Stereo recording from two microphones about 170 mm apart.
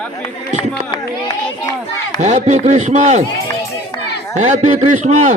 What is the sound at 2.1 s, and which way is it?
A man's voice, 45° right (ahead or behind).